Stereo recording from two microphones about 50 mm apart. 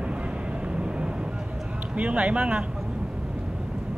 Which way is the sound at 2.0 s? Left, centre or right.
Right.